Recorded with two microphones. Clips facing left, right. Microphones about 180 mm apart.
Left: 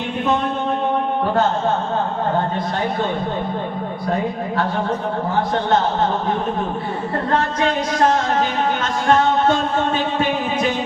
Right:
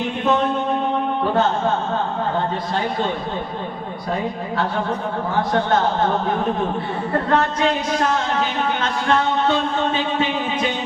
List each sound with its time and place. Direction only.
8.4 s speech: 45° left (ahead or behind)